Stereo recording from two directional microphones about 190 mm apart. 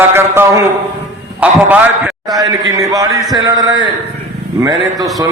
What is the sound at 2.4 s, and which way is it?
A man's voice, 20° right (ahead or behind).